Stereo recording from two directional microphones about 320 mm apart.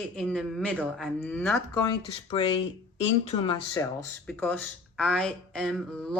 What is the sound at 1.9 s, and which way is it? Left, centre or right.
Speech, centre.